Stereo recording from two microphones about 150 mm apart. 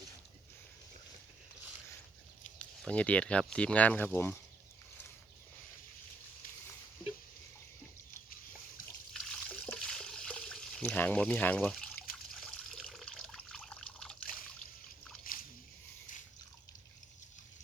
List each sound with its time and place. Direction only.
2.6 s speech: 10° left (ahead or behind)
9.1 s water: 5° left (ahead or behind)
15.2 s a sound: 70° left (ahead or behind)